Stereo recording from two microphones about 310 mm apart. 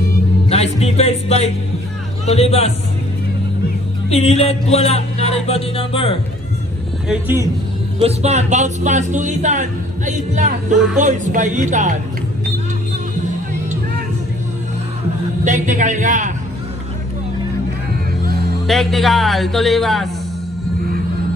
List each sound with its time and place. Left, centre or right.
0.5 s music: centre
4.1 s music: centre
7.1 s a man's voice: centre
8.0 s a man's voice: right
15.4 s a man's voice: right
18.2 s music: right
18.7 s speech: centre